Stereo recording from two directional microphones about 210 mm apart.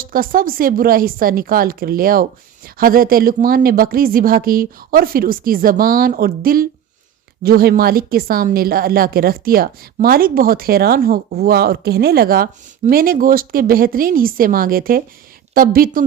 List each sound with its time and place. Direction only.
0.0 s speech: 45° right (ahead or behind)